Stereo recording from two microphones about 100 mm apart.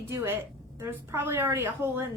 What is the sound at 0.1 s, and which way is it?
A woman's voice, 30° right (ahead or behind).